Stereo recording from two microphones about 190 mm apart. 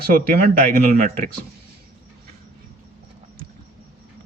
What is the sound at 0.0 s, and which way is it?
Speech, 50° right (ahead or behind).